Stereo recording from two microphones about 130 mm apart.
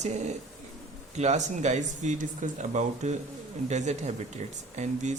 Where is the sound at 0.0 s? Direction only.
65° right (ahead or behind).